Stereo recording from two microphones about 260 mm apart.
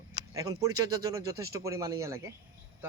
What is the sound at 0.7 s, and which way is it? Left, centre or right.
Speech, right.